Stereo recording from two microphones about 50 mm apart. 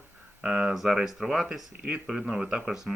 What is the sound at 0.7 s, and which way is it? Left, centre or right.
Speech, centre.